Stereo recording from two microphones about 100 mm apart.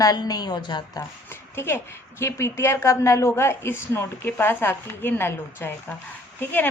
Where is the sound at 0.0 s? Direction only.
40° left (ahead or behind).